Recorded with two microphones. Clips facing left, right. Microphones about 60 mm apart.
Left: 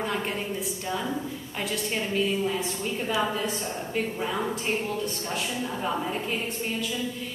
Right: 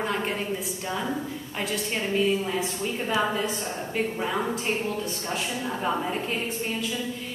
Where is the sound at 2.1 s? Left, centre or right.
Centre.